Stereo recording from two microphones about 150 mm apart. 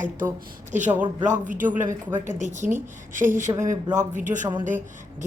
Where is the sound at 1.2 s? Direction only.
55° right (ahead or behind).